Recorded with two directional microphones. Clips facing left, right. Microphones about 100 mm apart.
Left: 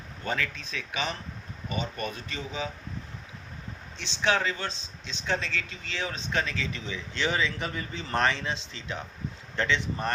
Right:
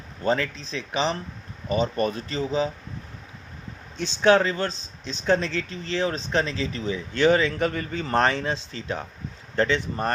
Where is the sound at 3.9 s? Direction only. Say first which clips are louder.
Right 9 dB; 50° right (ahead or behind).